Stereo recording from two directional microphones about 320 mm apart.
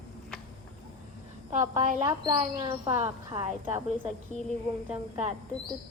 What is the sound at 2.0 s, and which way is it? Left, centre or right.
Speech, centre.